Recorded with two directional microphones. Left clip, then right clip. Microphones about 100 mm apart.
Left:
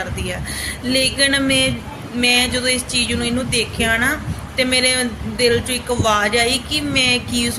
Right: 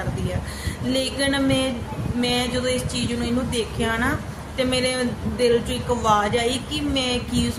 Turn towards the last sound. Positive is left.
turn(degrees=-35)  # may be behind; listen again after turning